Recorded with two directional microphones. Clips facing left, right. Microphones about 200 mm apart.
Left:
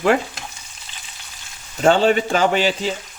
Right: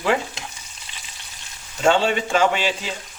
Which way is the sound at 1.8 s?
40° left (ahead or behind).